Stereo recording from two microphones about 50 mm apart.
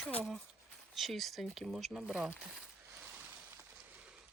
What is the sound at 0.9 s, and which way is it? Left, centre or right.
Speech, centre.